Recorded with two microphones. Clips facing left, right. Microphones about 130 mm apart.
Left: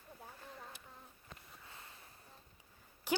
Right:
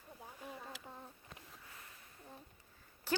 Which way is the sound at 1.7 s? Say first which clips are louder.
Left 1 dB; 25° left (ahead or behind).